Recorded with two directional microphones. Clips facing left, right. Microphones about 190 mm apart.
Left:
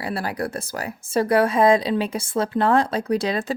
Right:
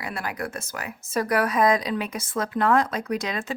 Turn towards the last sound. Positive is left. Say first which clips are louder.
# left 5 dB
turn(degrees=30)  # may be behind; listen again after turning